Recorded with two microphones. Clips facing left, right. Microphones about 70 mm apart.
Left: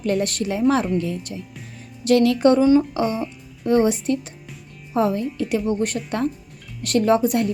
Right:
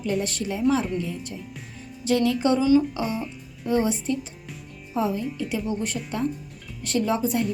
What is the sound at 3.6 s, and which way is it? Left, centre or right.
A woman's voice, left.